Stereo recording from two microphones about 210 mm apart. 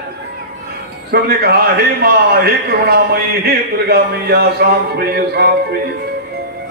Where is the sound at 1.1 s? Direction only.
50° right (ahead or behind).